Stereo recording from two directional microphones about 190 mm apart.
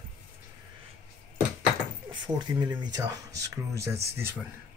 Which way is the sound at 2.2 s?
25° right (ahead or behind).